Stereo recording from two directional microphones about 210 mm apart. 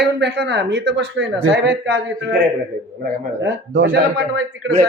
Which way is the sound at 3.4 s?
60° right (ahead or behind).